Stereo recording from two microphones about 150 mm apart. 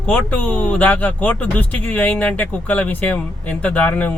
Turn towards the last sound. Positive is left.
turn(degrees=10)  # may be behind; listen again after turning